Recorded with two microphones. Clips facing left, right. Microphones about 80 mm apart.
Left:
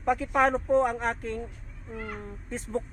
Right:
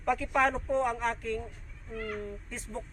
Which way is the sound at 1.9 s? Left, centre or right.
Centre.